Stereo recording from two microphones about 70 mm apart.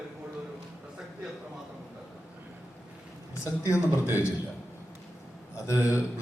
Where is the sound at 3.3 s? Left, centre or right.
Left.